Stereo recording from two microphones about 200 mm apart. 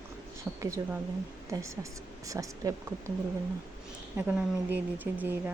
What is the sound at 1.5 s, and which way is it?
Speech, 15° right (ahead or behind).